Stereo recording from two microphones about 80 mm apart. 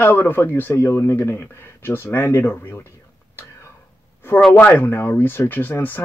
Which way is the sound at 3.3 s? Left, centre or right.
Left.